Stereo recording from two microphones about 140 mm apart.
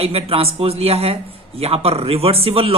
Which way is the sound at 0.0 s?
45° right (ahead or behind).